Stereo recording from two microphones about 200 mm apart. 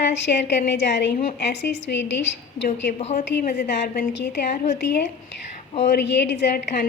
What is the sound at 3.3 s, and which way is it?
A woman's voice, 50° left (ahead or behind).